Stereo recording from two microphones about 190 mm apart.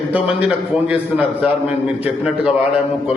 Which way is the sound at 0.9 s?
10° right (ahead or behind).